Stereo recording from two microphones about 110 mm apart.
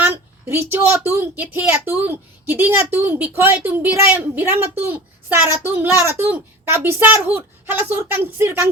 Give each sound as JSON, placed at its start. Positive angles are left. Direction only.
{"t": 0.0, "sound": "a woman's voice", "side_deg": -20}